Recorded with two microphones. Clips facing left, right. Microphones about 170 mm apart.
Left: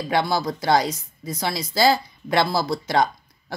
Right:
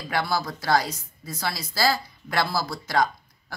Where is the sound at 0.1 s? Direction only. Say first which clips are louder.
Left 4 dB; 25° left (ahead or behind).